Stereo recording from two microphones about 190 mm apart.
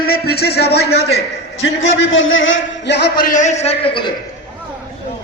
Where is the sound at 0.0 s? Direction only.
55° left (ahead or behind).